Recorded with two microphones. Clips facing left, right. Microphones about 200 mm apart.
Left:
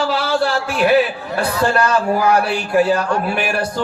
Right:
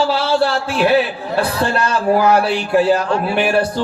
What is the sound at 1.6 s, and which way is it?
A man's voice, 30° right (ahead or behind).